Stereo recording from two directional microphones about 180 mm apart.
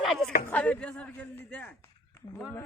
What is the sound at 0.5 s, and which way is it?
A man's voice, 10° left (ahead or behind).